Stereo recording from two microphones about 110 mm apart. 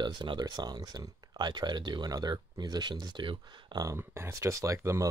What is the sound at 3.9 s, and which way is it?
Speech, 25° right (ahead or behind).